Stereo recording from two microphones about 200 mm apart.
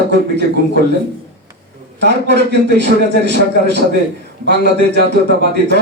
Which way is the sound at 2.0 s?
60° right (ahead or behind).